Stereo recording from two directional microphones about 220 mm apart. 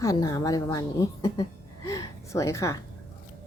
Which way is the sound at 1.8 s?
15° left (ahead or behind).